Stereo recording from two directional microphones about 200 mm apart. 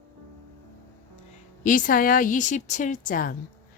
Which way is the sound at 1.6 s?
40° left (ahead or behind).